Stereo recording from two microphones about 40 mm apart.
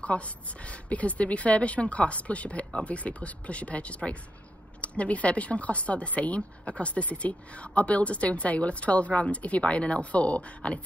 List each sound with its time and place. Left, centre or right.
0.1 s speech: left